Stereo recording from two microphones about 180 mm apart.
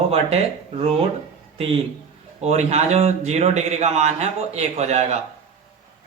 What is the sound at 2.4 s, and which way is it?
Speech, 35° right (ahead or behind).